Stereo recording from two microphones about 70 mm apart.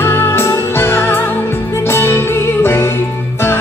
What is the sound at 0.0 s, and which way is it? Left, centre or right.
Music, left.